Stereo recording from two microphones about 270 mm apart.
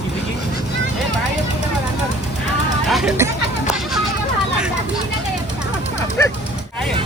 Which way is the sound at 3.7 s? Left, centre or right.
Centre.